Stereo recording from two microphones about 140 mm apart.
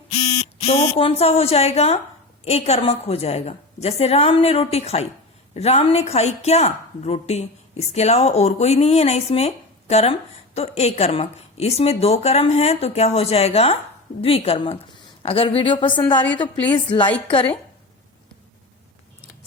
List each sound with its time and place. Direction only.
0.3 s a woman's voice: 50° left (ahead or behind)